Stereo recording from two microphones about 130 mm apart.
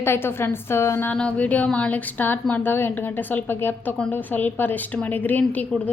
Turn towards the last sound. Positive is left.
turn(degrees=15)  # may be behind; listen again after turning